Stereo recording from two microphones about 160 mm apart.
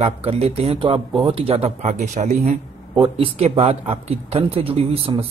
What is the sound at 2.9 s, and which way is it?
Speech, 35° right (ahead or behind).